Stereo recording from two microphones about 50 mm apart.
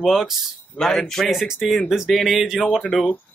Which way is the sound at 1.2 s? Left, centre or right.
Centre.